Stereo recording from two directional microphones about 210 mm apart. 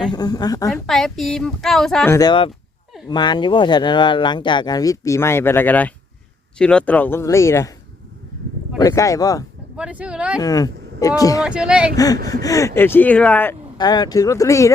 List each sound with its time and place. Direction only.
0.0 s speech: 20° left (ahead or behind)
0.7 s a woman's voice: centre (ahead or behind)
2.1 s speech: 20° left (ahead or behind)
8.8 s speech: 15° left (ahead or behind)
9.7 s a woman's voice: 5° right (ahead or behind)
10.4 s speech: 15° left (ahead or behind)
11.4 s a woman's voice: 5° right (ahead or behind)
11.9 s speech: 15° left (ahead or behind)
13.7 s speech: 20° left (ahead or behind)